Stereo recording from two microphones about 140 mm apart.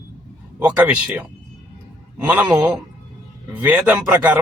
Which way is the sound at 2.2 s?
10° right (ahead or behind).